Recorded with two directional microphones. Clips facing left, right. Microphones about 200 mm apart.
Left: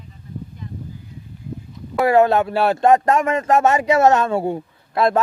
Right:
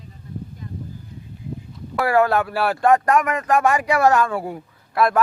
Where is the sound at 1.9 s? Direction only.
20° left (ahead or behind).